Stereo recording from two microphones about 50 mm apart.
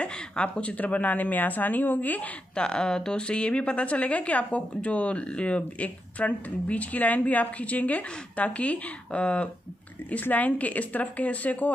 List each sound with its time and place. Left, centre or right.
0.0 s a woman's voice: left
2.5 s a woman's voice: centre